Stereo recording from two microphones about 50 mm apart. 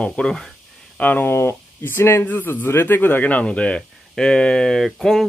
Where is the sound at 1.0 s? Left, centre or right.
Left.